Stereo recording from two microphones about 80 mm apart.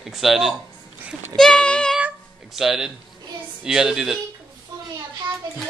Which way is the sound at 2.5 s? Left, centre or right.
Centre.